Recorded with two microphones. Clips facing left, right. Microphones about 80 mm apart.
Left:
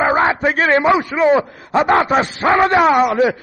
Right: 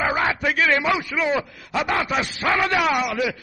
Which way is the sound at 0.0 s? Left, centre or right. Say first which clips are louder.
Left 7 dB; left.